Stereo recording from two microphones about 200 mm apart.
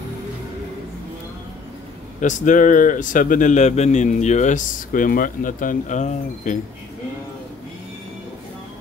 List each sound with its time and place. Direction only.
2.1 s speech: 40° left (ahead or behind)